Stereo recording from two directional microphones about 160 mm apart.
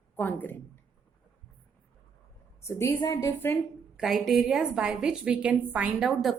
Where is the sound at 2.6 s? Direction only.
15° left (ahead or behind).